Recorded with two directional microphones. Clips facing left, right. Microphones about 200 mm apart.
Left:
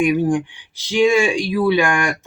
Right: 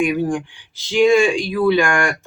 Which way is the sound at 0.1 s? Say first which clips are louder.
Left 3 dB; 20° left (ahead or behind).